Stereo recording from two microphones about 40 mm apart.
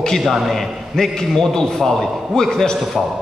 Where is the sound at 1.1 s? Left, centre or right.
Centre.